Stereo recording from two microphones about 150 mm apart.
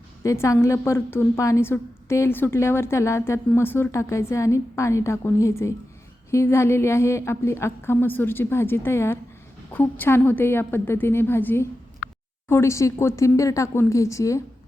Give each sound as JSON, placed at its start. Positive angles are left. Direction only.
{"t": 0.2, "sound": "a woman's voice", "side_deg": 20}